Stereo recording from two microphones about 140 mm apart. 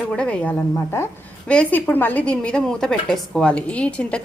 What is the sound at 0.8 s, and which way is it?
A woman's voice, 20° left (ahead or behind).